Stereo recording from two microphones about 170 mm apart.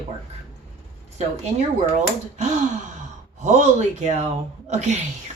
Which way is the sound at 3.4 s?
40° right (ahead or behind).